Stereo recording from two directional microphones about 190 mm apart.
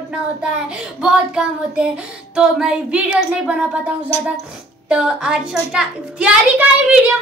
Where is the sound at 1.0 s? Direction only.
5° right (ahead or behind).